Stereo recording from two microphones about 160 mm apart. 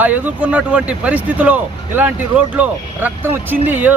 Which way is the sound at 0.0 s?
10° right (ahead or behind).